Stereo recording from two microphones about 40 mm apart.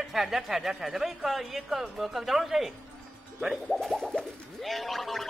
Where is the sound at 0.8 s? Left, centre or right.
Centre.